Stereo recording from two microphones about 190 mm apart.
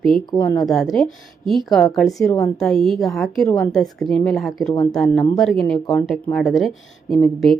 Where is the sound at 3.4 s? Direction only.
15° left (ahead or behind).